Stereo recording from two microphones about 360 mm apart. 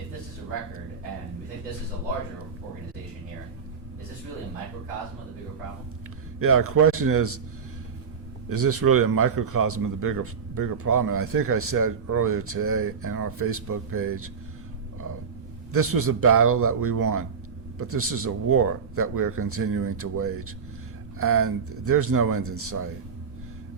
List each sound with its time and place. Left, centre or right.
6.4 s speech: right
8.4 s speech: right
15.7 s speech: right